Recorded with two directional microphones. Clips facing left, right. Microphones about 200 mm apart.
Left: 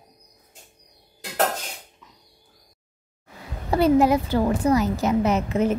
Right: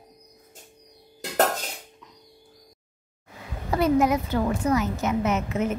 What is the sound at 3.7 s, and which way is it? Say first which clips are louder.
A woman's voice: left 3 dB; 30° left (ahead or behind).